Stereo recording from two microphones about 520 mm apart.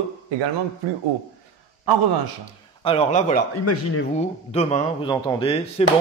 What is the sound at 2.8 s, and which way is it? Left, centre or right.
A man's voice, centre.